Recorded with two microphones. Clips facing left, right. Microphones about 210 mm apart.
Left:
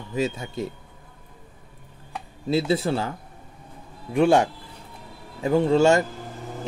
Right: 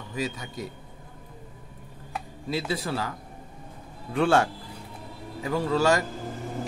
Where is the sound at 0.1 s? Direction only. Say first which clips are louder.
Left 6 dB; 25° left (ahead or behind).